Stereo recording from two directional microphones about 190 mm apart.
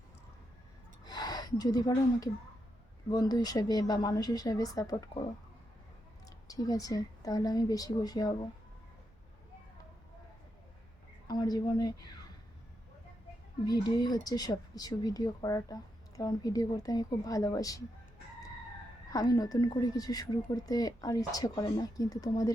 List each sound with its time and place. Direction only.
1.0 s speech: 20° left (ahead or behind)
6.2 s a woman's voice: 20° left (ahead or behind)
11.3 s speech: 20° left (ahead or behind)
13.7 s speech: 20° left (ahead or behind)
19.1 s speech: 20° left (ahead or behind)